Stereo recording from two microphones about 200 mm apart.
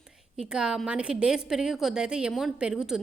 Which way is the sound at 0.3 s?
5° right (ahead or behind).